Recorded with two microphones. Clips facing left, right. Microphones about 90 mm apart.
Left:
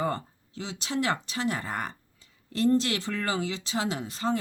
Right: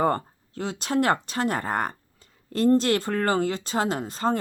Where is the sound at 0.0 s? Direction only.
50° right (ahead or behind).